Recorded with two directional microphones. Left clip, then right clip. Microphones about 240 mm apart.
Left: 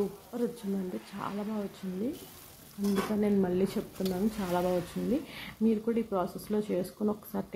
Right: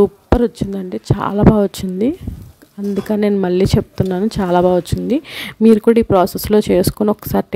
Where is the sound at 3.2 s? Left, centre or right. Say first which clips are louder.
Right 16 dB; right.